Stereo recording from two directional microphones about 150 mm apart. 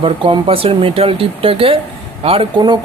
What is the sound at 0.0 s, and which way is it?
Speech, 35° right (ahead or behind).